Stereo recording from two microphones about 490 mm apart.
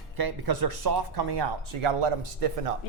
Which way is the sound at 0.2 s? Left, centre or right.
Right.